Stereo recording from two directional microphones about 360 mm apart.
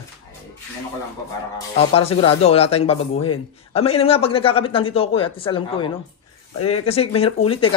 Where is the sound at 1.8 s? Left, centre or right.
Centre.